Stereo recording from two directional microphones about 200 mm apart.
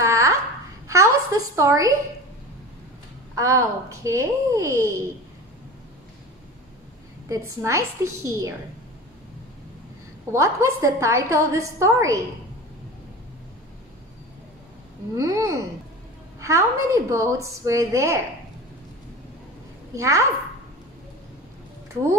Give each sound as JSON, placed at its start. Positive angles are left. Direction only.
{"t": 0.0, "sound": "a sound", "side_deg": -15}
{"t": 3.3, "sound": "a woman's voice", "side_deg": -15}
{"t": 7.2, "sound": "a woman's voice", "side_deg": -15}
{"t": 10.3, "sound": "a woman's voice", "side_deg": -15}
{"t": 15.1, "sound": "a woman's voice", "side_deg": -15}
{"t": 19.9, "sound": "a woman's voice", "side_deg": -15}